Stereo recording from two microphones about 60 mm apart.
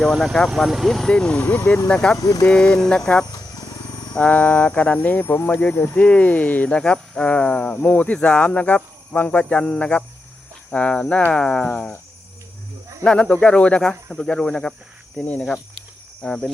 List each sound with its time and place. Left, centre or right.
0.0 s speech: centre
1.1 s speech: centre
2.1 s speech: left
2.5 s speech: centre
4.2 s speech: left
5.9 s speech: left
11.7 s speech: left
13.1 s speech: centre